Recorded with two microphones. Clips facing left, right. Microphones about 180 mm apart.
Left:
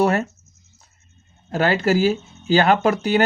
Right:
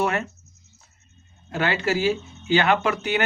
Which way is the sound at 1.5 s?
40° left (ahead or behind).